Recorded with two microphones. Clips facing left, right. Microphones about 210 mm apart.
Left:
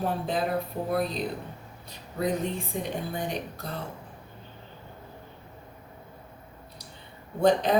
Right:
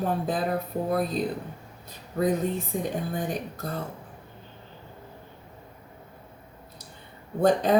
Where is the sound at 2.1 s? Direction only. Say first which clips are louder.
Right 3 dB; 50° right (ahead or behind).